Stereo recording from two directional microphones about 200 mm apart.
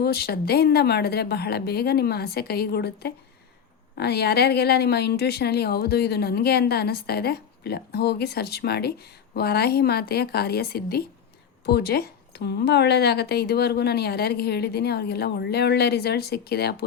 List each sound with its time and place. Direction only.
0.0 s a woman's voice: 50° left (ahead or behind)